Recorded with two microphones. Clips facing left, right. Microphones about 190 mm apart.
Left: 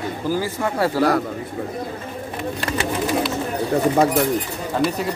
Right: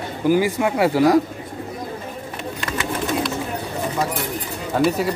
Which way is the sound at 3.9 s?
55° left (ahead or behind).